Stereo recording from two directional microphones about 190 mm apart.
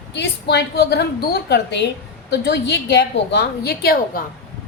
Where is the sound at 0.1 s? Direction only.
65° left (ahead or behind).